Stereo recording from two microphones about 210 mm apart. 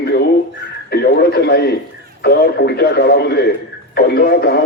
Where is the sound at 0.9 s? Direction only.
50° left (ahead or behind).